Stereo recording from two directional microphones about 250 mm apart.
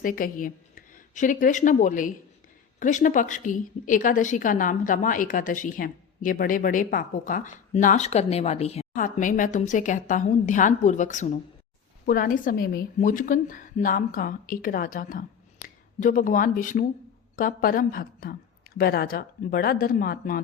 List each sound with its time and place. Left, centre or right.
0.0 s a woman's voice: left